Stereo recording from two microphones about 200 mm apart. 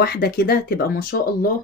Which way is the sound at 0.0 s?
50° left (ahead or behind).